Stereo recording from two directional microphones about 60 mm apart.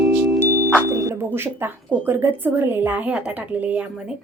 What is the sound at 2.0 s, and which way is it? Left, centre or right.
A woman's voice, right.